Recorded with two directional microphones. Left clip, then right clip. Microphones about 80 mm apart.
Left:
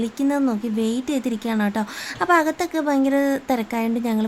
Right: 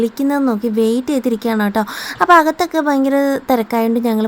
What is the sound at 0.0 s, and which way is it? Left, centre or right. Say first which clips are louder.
Speech: right 6 dB; right.